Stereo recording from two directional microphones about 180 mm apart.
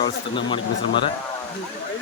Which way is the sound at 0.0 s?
25° left (ahead or behind).